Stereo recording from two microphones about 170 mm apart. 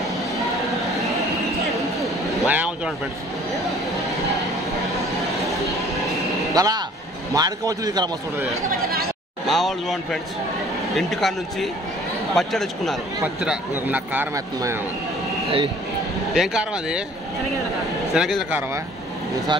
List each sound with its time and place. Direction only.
2.0 s a sound: 10° right (ahead or behind)
6.5 s a man's voice: 20° right (ahead or behind)
8.6 s a sound: 65° right (ahead or behind)
9.5 s a man's voice: centre (ahead or behind); by 14.8 s 15° right (ahead or behind)
16.3 s a man's voice: 5° right (ahead or behind)
18.1 s a man's voice: 5° right (ahead or behind)